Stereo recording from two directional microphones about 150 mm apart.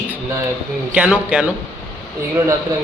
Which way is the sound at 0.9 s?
10° right (ahead or behind).